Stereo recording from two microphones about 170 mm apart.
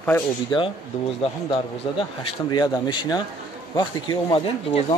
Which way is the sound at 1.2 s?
30° left (ahead or behind).